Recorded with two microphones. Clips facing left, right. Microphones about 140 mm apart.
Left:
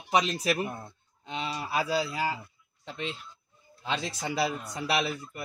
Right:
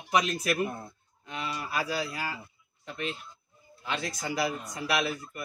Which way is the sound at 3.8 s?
25° left (ahead or behind).